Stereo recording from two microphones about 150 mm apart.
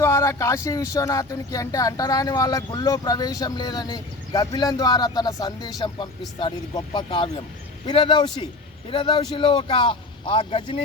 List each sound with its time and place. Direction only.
0.0 s speech: 20° left (ahead or behind); by 10.8 s 35° left (ahead or behind)